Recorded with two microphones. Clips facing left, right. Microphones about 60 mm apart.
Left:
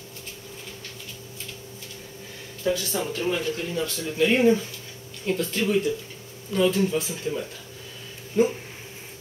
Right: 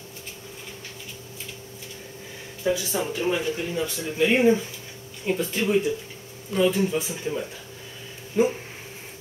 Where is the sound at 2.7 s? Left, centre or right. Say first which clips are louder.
Right 1 dB; centre.